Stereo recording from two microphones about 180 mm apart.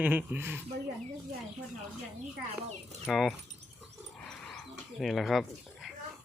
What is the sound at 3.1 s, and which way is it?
Speech, centre (ahead or behind).